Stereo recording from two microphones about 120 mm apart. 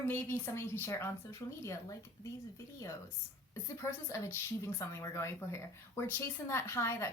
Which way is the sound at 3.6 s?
25° left (ahead or behind).